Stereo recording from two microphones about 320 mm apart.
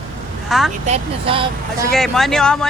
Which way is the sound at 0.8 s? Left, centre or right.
Centre.